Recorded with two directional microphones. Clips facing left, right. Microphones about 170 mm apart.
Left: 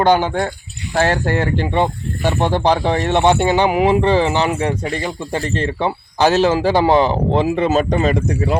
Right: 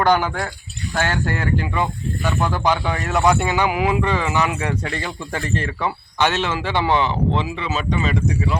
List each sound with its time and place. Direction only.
0.0 s speech: 25° left (ahead or behind)
4.8 s speech: 15° left (ahead or behind)
5.5 s speech: 30° left (ahead or behind); by 8.5 s 45° left (ahead or behind)